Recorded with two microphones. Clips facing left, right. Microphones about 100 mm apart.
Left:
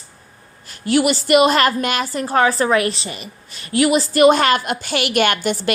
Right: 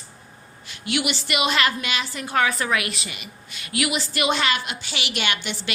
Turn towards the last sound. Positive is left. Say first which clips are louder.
# left 10 dB
turn(degrees=45)  # may be behind; listen again after turning